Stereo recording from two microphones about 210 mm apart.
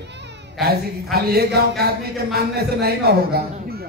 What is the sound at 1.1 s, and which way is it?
Music, 50° right (ahead or behind).